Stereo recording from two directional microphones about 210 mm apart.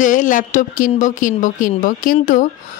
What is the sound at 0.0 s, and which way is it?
A woman's voice, 35° left (ahead or behind).